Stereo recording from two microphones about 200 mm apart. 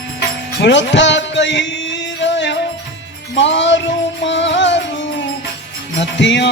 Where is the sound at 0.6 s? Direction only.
65° left (ahead or behind).